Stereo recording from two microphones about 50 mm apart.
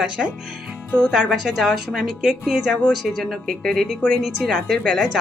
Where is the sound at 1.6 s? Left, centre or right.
Centre.